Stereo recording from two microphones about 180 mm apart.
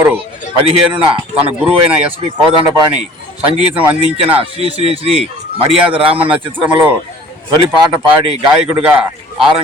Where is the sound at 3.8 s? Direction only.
30° right (ahead or behind).